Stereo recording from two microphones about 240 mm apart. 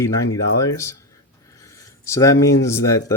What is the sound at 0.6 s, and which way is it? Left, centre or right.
Speech, centre.